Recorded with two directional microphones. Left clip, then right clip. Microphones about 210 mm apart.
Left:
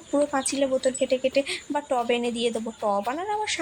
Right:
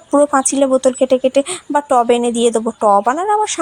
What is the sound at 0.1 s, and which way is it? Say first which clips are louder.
Speech: right 12 dB; 25° right (ahead or behind).